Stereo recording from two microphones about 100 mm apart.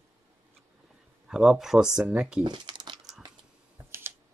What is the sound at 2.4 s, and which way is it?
Crumpling, 50° right (ahead or behind).